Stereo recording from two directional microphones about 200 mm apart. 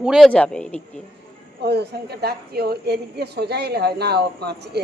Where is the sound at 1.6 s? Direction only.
55° right (ahead or behind).